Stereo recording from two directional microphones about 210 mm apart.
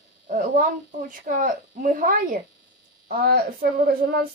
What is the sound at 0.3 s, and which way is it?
Speech, 40° right (ahead or behind).